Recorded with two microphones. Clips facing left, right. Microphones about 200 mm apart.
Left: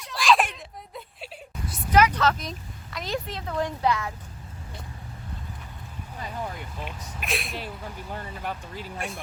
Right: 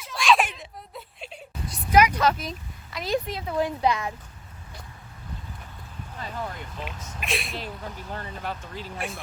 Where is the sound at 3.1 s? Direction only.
10° right (ahead or behind).